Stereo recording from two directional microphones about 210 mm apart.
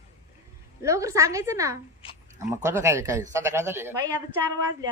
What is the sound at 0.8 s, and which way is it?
Speech, 15° right (ahead or behind).